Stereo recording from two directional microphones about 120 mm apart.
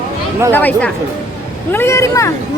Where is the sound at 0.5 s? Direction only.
15° left (ahead or behind).